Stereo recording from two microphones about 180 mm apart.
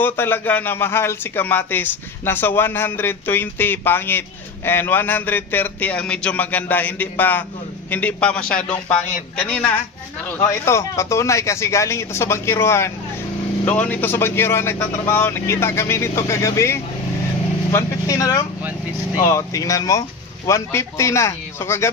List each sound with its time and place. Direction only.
0.0 s a man's voice: 10° left (ahead or behind)